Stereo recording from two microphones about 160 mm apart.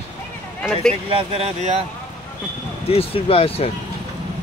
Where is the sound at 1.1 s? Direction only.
40° right (ahead or behind).